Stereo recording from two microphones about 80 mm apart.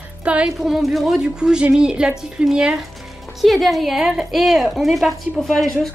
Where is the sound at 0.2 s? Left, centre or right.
Centre.